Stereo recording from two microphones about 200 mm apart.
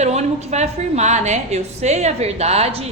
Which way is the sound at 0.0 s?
35° right (ahead or behind).